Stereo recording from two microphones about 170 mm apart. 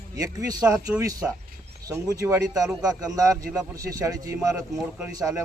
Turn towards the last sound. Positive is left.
turn(degrees=-20)  # may be behind; listen again after turning